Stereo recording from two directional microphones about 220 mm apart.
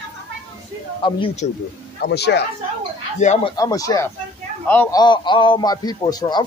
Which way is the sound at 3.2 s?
30° left (ahead or behind).